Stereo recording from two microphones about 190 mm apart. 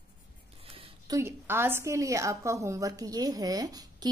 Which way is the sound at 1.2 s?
15° right (ahead or behind).